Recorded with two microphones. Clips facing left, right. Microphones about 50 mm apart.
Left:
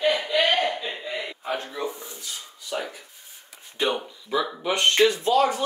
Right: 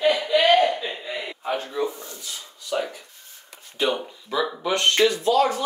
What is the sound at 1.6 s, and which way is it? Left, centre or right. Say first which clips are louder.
Speech: right 4 dB; centre.